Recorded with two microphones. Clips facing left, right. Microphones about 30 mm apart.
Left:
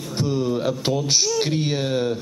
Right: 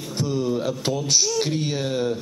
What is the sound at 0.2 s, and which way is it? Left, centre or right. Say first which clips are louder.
Speech: left 1 dB; centre.